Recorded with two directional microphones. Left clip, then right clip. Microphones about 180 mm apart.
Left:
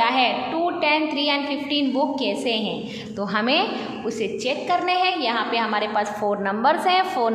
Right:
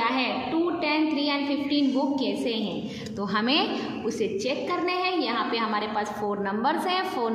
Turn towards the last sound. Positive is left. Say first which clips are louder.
# left 7 dB
turn(degrees=10)  # may be behind; listen again after turning